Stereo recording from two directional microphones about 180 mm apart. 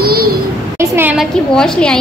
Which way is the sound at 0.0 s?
55° right (ahead or behind).